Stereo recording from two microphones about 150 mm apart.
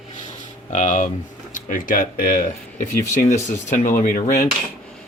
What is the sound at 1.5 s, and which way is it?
Speech, 65° left (ahead or behind).